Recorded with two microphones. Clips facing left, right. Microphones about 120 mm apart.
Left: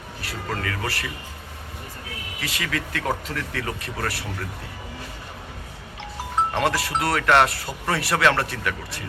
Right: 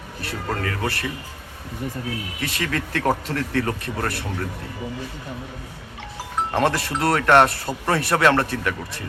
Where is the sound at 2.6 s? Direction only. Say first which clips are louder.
Right 3 dB; 35° right (ahead or behind).